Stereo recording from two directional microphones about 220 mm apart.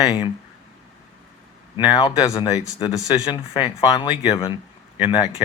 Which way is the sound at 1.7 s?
20° left (ahead or behind).